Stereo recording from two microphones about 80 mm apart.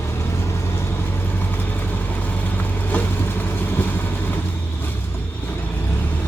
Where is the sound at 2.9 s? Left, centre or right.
Left.